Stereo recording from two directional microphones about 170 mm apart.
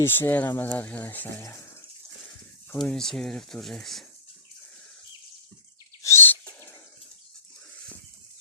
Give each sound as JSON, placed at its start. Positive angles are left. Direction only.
{"t": 0.0, "sound": "speech", "side_deg": 10}
{"t": 2.7, "sound": "speech", "side_deg": 5}
{"t": 6.0, "sound": "owl", "side_deg": 15}